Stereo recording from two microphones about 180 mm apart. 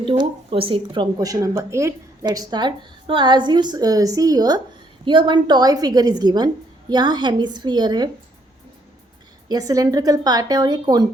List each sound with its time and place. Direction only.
0.0 s a woman's voice: 30° right (ahead or behind)
9.5 s a woman's voice: 20° right (ahead or behind)